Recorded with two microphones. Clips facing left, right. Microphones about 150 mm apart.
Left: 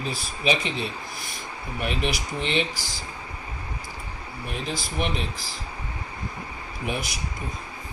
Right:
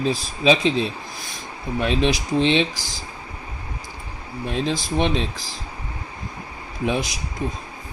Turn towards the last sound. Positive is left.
turn(degrees=-30)  # may be behind; listen again after turning